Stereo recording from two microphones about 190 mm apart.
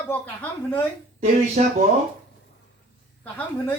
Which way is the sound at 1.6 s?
35° right (ahead or behind).